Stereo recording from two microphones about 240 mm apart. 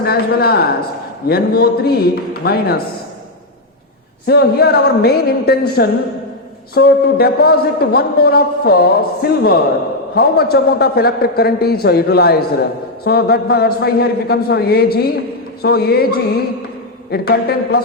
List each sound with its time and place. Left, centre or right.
0.0 s speech: left
4.3 s speech: left